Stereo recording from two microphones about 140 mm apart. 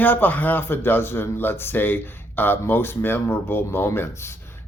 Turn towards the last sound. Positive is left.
turn(degrees=20)  # may be behind; listen again after turning